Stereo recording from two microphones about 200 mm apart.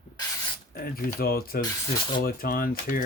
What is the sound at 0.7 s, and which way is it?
Speech, 45° left (ahead or behind).